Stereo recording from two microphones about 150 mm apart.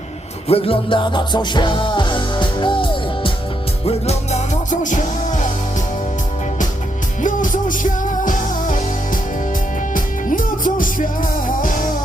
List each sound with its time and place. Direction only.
0.4 s music: 40° left (ahead or behind)
3.8 s music: 45° left (ahead or behind)
7.2 s music: 60° left (ahead or behind)
9.9 s music: 65° left (ahead or behind)